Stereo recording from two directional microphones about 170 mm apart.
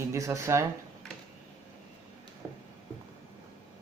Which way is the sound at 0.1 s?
15° right (ahead or behind).